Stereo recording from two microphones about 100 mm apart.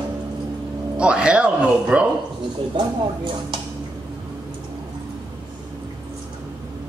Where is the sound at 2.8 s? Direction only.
50° right (ahead or behind).